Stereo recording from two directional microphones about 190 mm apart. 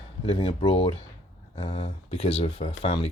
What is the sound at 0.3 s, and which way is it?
Speech, 30° left (ahead or behind).